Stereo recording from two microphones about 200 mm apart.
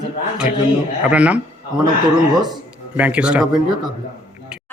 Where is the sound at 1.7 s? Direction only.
20° right (ahead or behind).